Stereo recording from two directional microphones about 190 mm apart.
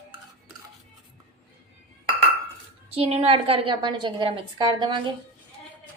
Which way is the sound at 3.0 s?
30° right (ahead or behind).